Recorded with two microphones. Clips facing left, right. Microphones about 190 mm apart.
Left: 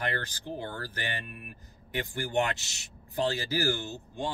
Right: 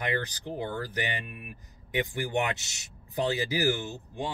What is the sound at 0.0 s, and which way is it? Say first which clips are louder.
Speech: right 3 dB; 15° right (ahead or behind).